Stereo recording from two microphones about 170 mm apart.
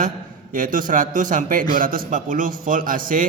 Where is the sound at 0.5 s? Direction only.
55° right (ahead or behind).